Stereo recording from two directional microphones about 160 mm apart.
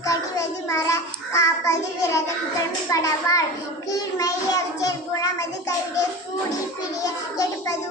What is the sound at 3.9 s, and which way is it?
Child singing, 20° left (ahead or behind).